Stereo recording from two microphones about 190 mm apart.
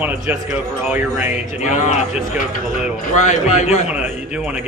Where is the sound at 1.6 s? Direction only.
40° left (ahead or behind).